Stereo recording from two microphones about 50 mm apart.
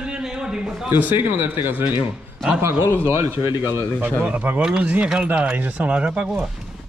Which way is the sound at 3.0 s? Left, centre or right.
Right.